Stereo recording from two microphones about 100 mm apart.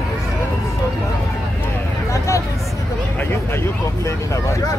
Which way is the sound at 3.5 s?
25° left (ahead or behind).